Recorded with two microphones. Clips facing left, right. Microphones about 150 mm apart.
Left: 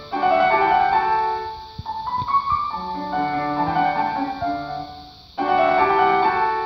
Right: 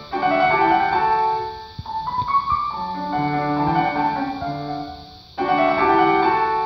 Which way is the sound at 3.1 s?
Centre (ahead or behind).